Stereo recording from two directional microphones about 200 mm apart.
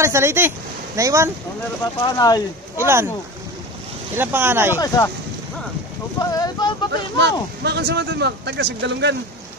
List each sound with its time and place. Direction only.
0.0 s speech: 15° right (ahead or behind)
2.0 s speech: 20° left (ahead or behind)
2.8 s speech: 15° right (ahead or behind)
4.2 s speech: 10° right (ahead or behind)
4.7 s speech: 15° left (ahead or behind)
6.3 s speech: 20° left (ahead or behind)
7.2 s speech: 60° right (ahead or behind)